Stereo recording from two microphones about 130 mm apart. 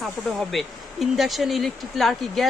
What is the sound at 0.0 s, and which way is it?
Speech, centre (ahead or behind).